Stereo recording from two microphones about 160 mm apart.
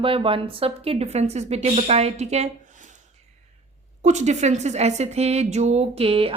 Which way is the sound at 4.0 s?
45° right (ahead or behind).